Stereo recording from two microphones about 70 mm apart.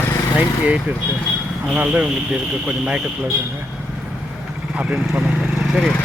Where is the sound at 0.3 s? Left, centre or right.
Centre.